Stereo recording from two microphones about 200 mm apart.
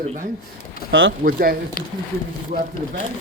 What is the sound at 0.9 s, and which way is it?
Speech, 75° right (ahead or behind).